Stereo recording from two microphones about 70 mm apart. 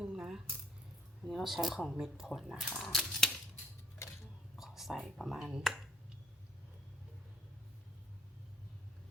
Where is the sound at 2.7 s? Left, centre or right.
Centre.